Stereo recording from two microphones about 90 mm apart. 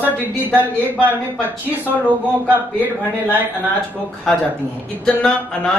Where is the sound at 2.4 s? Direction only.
20° right (ahead or behind).